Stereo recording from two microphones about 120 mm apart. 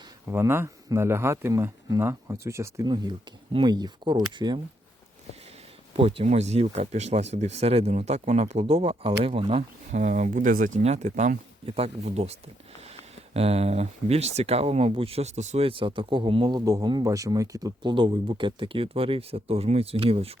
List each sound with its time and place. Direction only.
0.3 s speech: 20° right (ahead or behind)
2.8 s speech: 35° right (ahead or behind)
6.0 s speech: 50° right (ahead or behind)
6.2 s speech: 65° right (ahead or behind)
9.9 s speech: 90° right
11.6 s speech: 55° right (ahead or behind)